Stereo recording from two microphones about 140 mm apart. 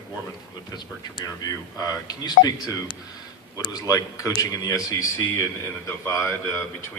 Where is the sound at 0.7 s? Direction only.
30° left (ahead or behind).